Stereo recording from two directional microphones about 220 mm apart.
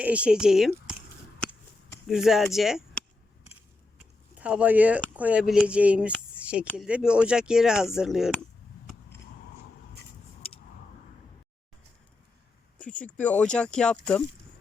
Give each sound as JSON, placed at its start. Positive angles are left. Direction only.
{"t": 0.0, "sound": "speech", "side_deg": -5}
{"t": 2.0, "sound": "speech", "side_deg": 0}
{"t": 4.4, "sound": "speech", "side_deg": -5}
{"t": 10.4, "sound": "a sound", "side_deg": 25}
{"t": 12.8, "sound": "speech", "side_deg": 5}